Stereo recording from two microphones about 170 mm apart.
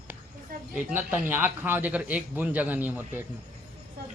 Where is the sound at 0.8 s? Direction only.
10° right (ahead or behind).